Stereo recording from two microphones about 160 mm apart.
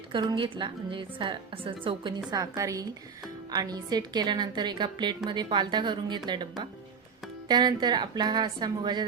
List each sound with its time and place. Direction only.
0.1 s a woman's voice: 30° right (ahead or behind)